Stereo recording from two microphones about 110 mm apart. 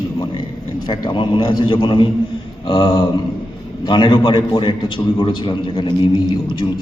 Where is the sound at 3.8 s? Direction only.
45° left (ahead or behind).